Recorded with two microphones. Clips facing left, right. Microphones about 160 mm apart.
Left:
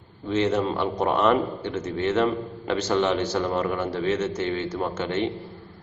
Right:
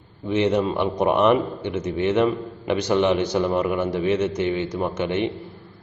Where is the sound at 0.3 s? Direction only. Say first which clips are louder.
Right 2 dB; 15° right (ahead or behind).